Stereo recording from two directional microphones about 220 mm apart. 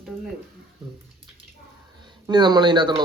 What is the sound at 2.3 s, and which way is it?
Speech, 20° right (ahead or behind).